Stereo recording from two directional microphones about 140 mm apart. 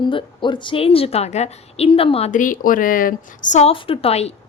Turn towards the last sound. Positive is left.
turn(degrees=45)  # may be behind; listen again after turning